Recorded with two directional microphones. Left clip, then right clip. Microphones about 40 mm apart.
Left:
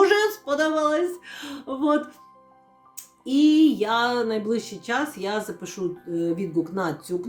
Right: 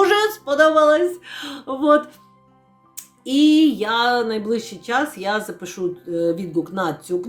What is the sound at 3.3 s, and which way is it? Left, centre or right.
Speech, right.